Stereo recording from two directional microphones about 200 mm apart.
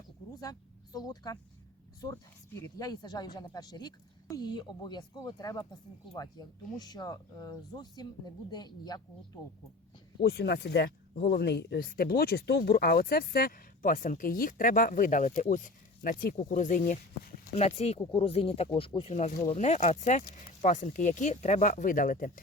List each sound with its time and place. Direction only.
0.9 s speech: 20° left (ahead or behind)
2.6 s speech: 20° left (ahead or behind)
10.2 s speech: 55° left (ahead or behind)